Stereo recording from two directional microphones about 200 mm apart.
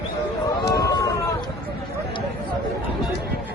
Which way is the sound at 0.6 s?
15° left (ahead or behind).